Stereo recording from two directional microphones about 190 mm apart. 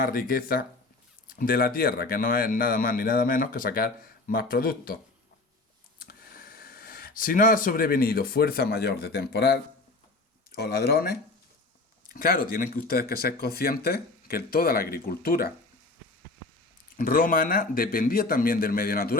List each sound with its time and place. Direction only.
0.0 s speech: 50° left (ahead or behind)
6.0 s speech: 50° left (ahead or behind)
17.0 s speech: 45° left (ahead or behind)